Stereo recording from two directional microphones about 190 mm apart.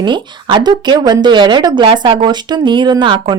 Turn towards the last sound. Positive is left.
turn(degrees=-25)  # may be behind; listen again after turning